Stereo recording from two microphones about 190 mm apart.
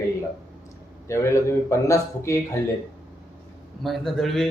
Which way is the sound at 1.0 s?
15° left (ahead or behind).